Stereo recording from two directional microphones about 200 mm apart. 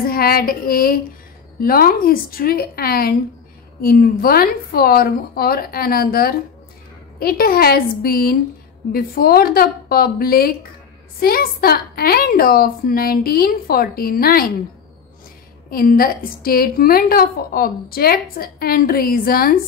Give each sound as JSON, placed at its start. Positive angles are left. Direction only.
{"t": 0.0, "sound": "a woman's voice", "side_deg": 50}
{"t": 15.7, "sound": "a woman's voice", "side_deg": 45}